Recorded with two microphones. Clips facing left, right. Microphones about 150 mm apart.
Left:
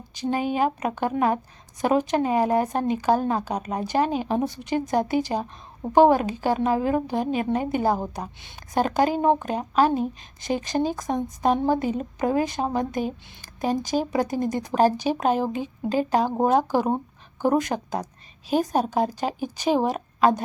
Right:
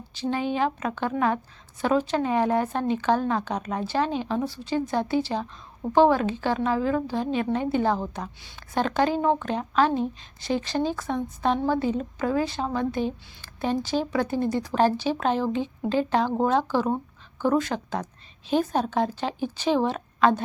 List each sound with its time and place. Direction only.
0.3 s a woman's voice: 10° left (ahead or behind)